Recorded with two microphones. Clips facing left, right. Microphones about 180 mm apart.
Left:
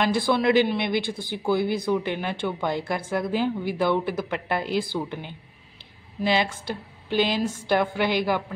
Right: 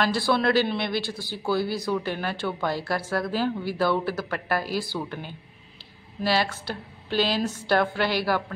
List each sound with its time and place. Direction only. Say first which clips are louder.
0.0 s a woman's voice: left 1 dB; 15° left (ahead or behind)